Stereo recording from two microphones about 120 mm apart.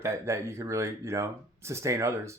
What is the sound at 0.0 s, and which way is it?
Speech, 25° right (ahead or behind).